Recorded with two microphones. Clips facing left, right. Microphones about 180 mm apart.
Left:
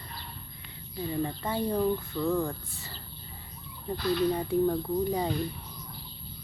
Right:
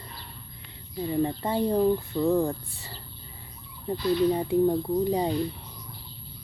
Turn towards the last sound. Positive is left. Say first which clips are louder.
# right 3 dB
turn(degrees=-20)  # may be behind; listen again after turning